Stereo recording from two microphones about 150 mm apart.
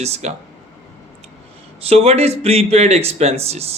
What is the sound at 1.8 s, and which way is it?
Speech, 45° right (ahead or behind).